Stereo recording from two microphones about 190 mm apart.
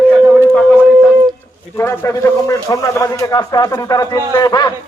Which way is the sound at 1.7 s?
15° left (ahead or behind).